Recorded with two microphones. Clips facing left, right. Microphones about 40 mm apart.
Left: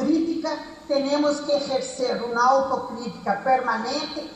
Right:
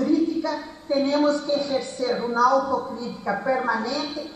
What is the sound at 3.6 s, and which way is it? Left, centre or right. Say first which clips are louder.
Speech: even; right.